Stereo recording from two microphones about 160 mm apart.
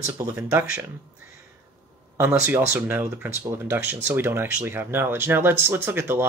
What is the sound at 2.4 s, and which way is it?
Speech, 15° right (ahead or behind).